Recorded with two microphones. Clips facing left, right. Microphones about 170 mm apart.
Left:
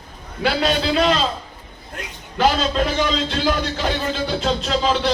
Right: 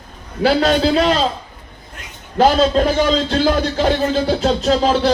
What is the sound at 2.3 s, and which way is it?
Music, 40° right (ahead or behind).